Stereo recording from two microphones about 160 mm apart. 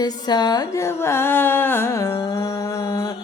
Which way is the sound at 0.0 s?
25° left (ahead or behind).